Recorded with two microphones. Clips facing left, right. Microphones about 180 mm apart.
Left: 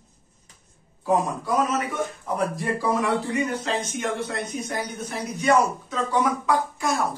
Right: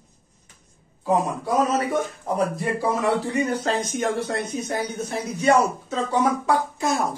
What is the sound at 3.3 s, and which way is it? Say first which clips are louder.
Speech: right 2 dB; 40° right (ahead or behind).